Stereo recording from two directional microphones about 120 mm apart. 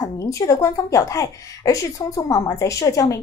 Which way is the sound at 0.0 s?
25° left (ahead or behind).